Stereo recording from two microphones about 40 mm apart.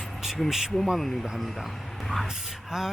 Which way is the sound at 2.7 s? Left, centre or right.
Centre.